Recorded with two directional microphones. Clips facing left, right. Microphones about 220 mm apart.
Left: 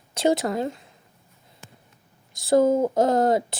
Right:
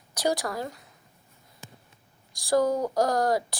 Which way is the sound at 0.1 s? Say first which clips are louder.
Left 6 dB; 25° left (ahead or behind).